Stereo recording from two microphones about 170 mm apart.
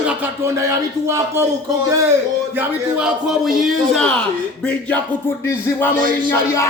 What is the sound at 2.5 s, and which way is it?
A man's voice, 10° right (ahead or behind).